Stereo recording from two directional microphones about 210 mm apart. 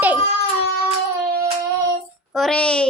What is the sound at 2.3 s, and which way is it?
Speech, centre (ahead or behind).